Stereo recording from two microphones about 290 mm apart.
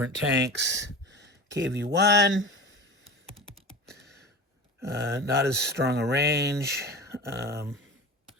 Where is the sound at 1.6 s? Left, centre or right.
Right.